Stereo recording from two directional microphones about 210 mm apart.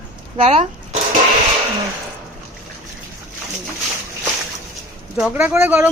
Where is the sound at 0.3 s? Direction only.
30° right (ahead or behind).